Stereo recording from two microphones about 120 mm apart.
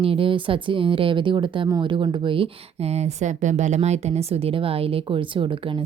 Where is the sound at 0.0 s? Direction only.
50° right (ahead or behind).